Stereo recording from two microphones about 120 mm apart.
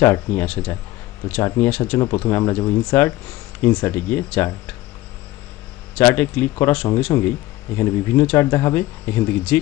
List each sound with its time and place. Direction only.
0.0 s speech: 20° left (ahead or behind)
5.9 s speech: 20° left (ahead or behind)